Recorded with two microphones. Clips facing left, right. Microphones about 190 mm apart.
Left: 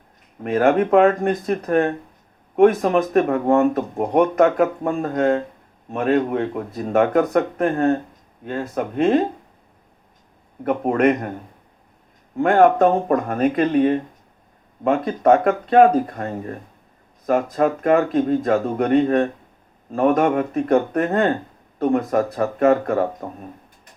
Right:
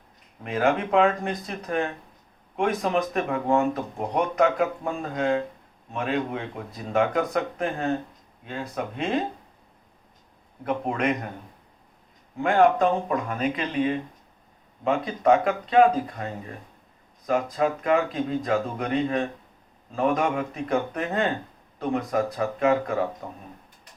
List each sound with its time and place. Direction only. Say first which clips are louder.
0.4 s speech: left 7 dB; 50° left (ahead or behind)
10.6 s speech: left 8 dB; 50° left (ahead or behind)
12.4 s speech: left 5 dB; 50° left (ahead or behind)